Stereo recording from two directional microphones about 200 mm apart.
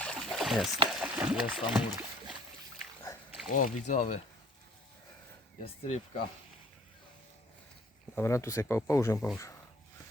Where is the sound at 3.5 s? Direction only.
40° left (ahead or behind).